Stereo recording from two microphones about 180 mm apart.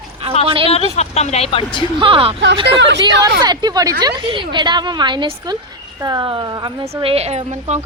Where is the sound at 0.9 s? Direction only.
35° left (ahead or behind).